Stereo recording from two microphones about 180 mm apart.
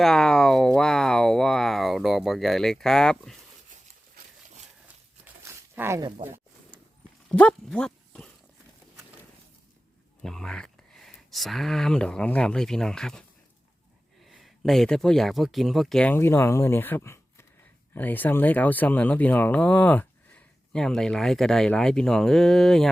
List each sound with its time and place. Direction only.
0.0 s speech: 5° left (ahead or behind)
5.2 s a sound: 10° right (ahead or behind)
6.1 s speech: 35° right (ahead or behind)
7.3 s speech: 5° left (ahead or behind)
10.2 s speech: 5° left (ahead or behind)
14.3 s speech: centre (ahead or behind)